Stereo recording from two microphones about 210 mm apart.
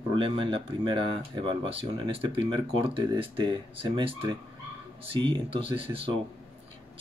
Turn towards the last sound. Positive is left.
turn(degrees=-25)  # may be behind; listen again after turning